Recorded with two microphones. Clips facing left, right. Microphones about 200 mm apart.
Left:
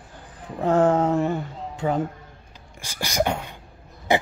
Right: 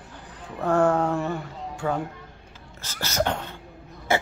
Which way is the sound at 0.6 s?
20° left (ahead or behind).